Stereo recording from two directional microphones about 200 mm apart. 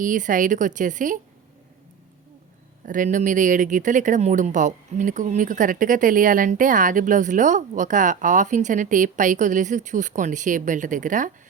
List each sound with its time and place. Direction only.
0.0 s speech: 40° right (ahead or behind)
2.8 s speech: 40° right (ahead or behind)